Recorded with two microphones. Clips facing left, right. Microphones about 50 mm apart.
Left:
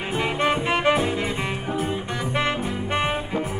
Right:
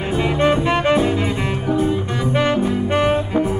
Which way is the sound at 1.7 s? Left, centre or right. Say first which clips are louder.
Right 11 dB; left.